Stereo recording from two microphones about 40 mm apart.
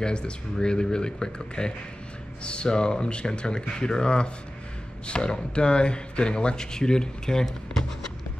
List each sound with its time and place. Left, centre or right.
0.0 s speech: left